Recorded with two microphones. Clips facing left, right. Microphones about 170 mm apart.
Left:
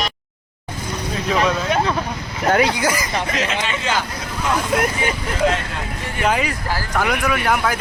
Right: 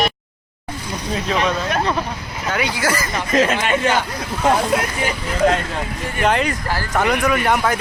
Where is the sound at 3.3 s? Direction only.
45° right (ahead or behind).